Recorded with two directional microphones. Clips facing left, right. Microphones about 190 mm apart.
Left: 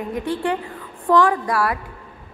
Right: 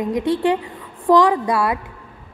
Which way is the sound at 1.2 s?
20° right (ahead or behind).